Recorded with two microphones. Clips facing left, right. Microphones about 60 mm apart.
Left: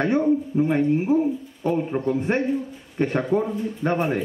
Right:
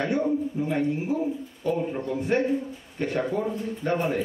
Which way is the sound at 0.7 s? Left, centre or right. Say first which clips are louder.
Left 6 dB; left.